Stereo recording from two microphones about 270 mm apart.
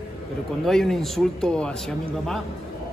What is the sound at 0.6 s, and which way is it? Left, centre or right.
Speech, centre.